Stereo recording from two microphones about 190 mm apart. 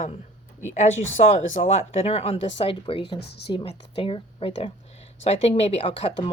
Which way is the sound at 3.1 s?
60° left (ahead or behind).